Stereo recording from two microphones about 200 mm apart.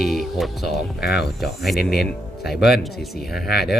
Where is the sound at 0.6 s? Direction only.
55° left (ahead or behind).